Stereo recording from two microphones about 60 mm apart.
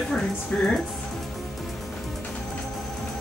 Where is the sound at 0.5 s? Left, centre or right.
Left.